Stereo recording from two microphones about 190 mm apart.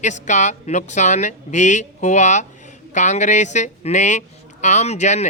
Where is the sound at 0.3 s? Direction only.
40° left (ahead or behind).